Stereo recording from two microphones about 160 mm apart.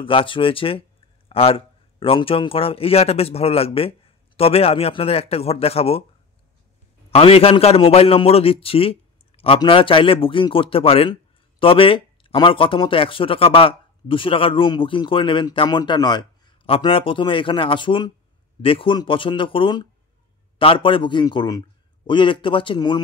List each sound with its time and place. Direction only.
0.0 s speech: 35° left (ahead or behind)
7.1 s speech: 35° left (ahead or behind)